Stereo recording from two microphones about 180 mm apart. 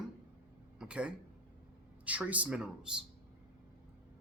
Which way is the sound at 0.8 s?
5° right (ahead or behind).